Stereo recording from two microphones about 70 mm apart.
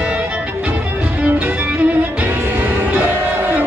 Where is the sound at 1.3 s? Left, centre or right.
Right.